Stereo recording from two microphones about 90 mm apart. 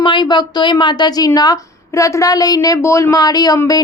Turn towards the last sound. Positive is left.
turn(degrees=45)  # may be behind; listen again after turning